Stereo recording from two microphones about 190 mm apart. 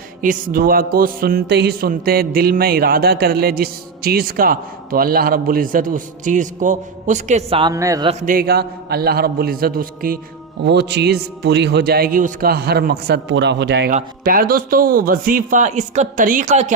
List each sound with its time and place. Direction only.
0.2 s speech: 45° right (ahead or behind)
7.6 s a man's voice: 15° right (ahead or behind)
8.2 s speech: 45° right (ahead or behind)
10.6 s a man's voice: 65° right (ahead or behind)
13.9 s speech: 50° right (ahead or behind)